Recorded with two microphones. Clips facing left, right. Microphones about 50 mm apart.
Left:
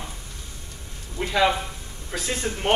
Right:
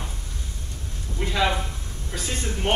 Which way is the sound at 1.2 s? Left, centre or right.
Centre.